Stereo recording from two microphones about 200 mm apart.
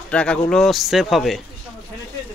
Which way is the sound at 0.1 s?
5° left (ahead or behind).